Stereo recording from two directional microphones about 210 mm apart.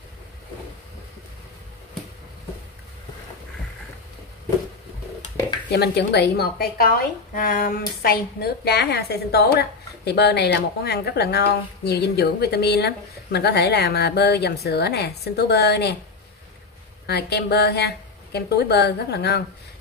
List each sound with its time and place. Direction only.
5.7 s a woman's voice: 50° left (ahead or behind)
17.0 s a woman's voice: 50° left (ahead or behind)